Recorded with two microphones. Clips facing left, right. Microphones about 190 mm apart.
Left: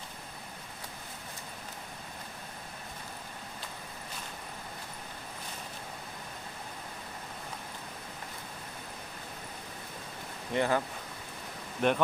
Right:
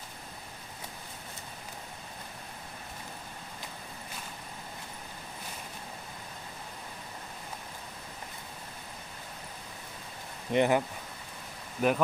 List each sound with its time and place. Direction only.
10.5 s speech: 20° right (ahead or behind)
11.8 s speech: 5° right (ahead or behind)